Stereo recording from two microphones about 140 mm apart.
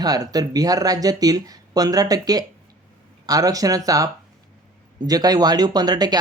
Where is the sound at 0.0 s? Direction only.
25° right (ahead or behind).